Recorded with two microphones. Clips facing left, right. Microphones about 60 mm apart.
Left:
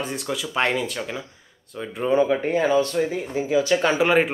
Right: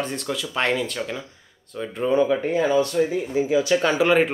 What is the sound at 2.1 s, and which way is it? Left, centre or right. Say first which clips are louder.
Speech: left 1 dB; left.